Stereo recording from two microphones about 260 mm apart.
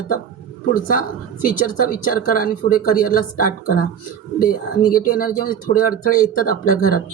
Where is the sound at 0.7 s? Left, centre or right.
Left.